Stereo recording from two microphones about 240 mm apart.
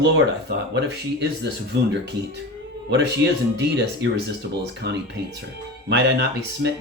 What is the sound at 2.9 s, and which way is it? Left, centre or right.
Speech, right.